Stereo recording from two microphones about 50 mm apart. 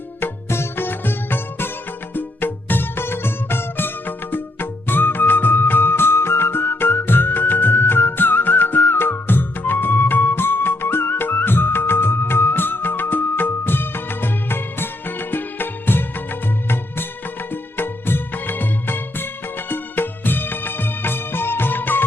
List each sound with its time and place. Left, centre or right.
0.2 s music: left